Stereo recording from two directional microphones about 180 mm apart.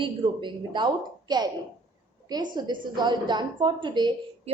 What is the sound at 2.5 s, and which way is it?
A woman's voice, 25° right (ahead or behind).